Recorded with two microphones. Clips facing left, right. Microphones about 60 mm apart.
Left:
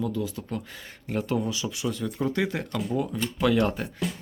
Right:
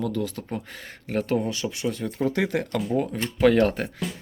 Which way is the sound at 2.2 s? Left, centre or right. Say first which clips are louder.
Right 4 dB; right.